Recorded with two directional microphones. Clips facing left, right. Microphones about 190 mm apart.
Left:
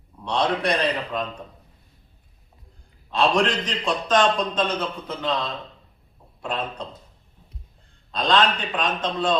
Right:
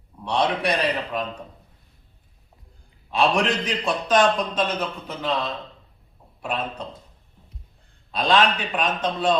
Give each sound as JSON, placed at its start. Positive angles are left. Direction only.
{"t": 0.3, "sound": "a man's voice", "side_deg": -10}
{"t": 3.1, "sound": "a man's voice", "side_deg": -10}
{"t": 8.1, "sound": "a man's voice", "side_deg": -10}